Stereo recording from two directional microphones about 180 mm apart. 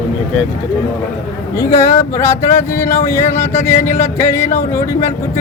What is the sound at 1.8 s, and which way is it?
Speech, 15° left (ahead or behind).